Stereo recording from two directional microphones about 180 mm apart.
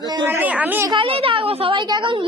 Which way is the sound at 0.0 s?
15° right (ahead or behind).